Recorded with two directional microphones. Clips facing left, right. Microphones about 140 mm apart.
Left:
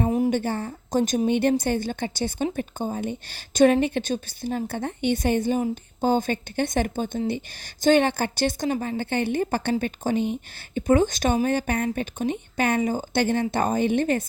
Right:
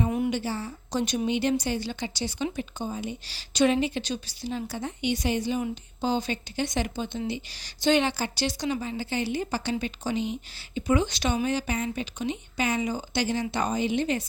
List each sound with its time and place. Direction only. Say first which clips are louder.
0.3 s a woman's voice: left 5 dB; 50° left (ahead or behind)